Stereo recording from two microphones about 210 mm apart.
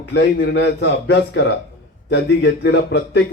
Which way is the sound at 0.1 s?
55° left (ahead or behind).